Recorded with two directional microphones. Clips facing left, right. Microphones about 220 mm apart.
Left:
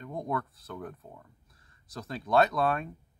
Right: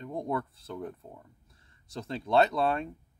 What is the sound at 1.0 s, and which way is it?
Speech, 5° right (ahead or behind).